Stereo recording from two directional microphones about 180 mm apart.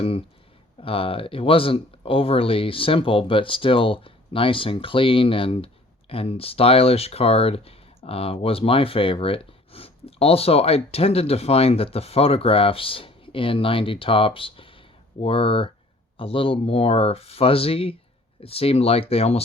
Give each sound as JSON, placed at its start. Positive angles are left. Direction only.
{"t": 0.0, "sound": "speech", "side_deg": 30}